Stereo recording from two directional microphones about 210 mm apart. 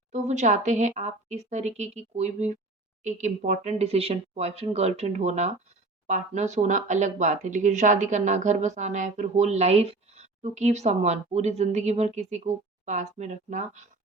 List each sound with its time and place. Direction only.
0.1 s speech: 35° right (ahead or behind)